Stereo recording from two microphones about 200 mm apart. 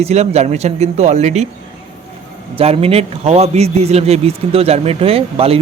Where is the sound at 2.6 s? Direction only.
30° right (ahead or behind).